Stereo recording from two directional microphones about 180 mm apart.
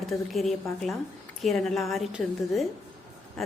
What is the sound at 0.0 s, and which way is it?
A woman's voice, centre (ahead or behind).